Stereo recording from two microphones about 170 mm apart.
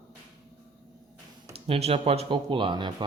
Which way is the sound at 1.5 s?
35° right (ahead or behind).